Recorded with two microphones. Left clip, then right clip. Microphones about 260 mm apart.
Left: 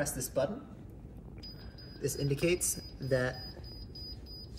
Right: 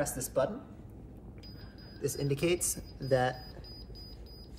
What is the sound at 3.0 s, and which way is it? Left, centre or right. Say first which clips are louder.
Speech: right 3 dB; right.